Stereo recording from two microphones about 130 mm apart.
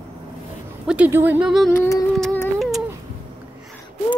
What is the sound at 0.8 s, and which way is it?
Speech, 10° right (ahead or behind).